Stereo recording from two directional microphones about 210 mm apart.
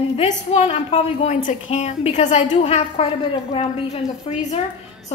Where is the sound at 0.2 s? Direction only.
30° left (ahead or behind).